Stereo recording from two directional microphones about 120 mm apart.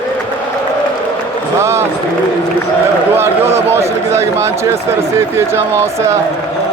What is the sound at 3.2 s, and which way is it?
Speech, 20° right (ahead or behind).